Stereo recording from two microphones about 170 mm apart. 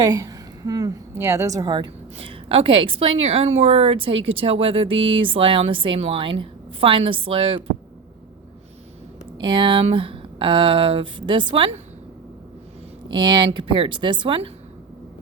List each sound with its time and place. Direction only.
0.0 s a woman's voice: 20° right (ahead or behind)
9.4 s speech: 30° right (ahead or behind)
13.1 s speech: 25° right (ahead or behind)